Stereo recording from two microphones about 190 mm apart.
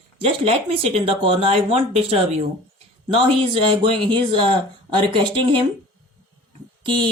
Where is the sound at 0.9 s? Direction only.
30° right (ahead or behind).